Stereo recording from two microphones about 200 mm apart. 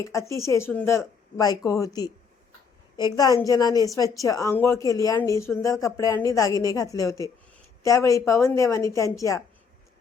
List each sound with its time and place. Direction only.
0.0 s speech: 15° left (ahead or behind)